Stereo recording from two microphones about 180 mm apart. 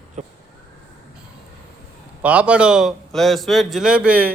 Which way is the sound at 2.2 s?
10° right (ahead or behind).